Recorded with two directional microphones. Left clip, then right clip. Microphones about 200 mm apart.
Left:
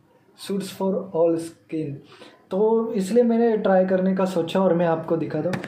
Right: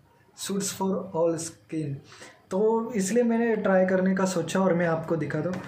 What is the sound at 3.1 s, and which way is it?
A woman's voice, 5° right (ahead or behind).